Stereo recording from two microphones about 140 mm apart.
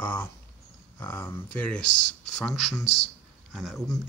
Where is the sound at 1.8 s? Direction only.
60° left (ahead or behind).